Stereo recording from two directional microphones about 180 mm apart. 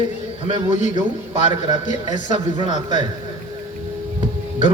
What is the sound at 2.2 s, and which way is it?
Speech, 25° right (ahead or behind).